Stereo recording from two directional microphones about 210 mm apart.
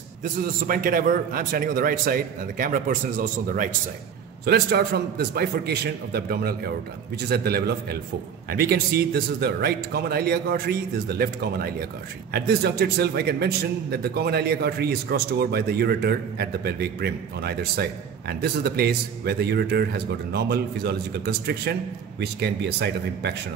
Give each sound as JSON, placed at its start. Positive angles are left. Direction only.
{"t": 0.2, "sound": "a man's voice", "side_deg": -40}
{"t": 4.5, "sound": "a man's voice", "side_deg": -50}